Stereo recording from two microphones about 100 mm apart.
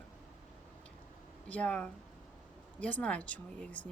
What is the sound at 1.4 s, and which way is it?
Speech, 15° left (ahead or behind).